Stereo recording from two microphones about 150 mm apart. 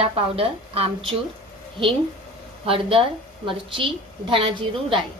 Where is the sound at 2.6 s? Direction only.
35° right (ahead or behind).